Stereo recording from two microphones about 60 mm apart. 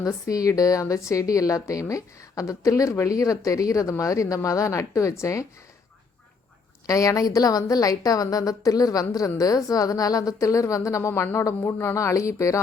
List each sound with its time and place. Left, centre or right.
0.0 s speech: left
6.8 s a woman's voice: left
11.1 s speech: left
11.9 s speech: left